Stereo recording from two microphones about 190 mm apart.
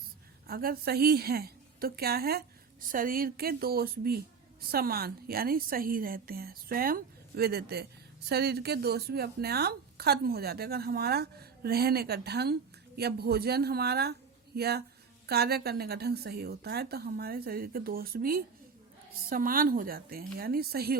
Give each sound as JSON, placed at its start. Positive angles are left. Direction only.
{"t": 0.4, "sound": "a woman's voice", "side_deg": -50}